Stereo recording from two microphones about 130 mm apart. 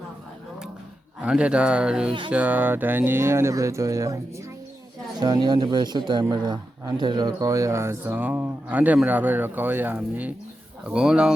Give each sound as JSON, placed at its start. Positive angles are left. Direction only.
{"t": 1.2, "sound": "speech", "side_deg": -10}